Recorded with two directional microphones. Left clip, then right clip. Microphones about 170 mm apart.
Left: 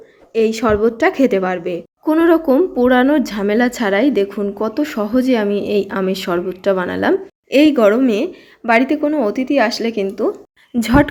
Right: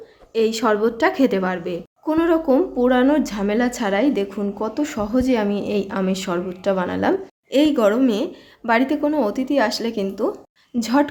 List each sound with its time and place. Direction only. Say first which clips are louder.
0.3 s a woman's voice: left 4 dB; 20° left (ahead or behind)